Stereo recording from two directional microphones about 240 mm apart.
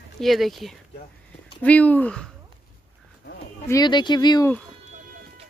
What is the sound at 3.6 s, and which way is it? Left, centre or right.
Speech, centre.